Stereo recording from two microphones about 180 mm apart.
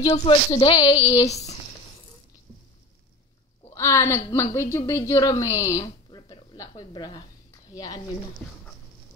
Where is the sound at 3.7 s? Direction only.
15° left (ahead or behind).